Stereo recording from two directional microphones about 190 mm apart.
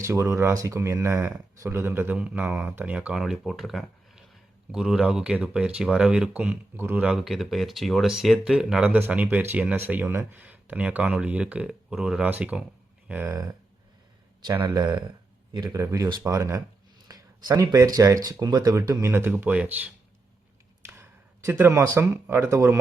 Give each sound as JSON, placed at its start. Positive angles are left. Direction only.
{"t": 0.0, "sound": "speech", "side_deg": -15}